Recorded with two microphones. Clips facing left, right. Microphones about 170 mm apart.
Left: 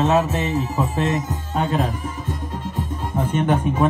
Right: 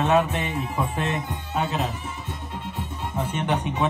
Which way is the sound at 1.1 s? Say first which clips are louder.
Left 4 dB; 40° left (ahead or behind).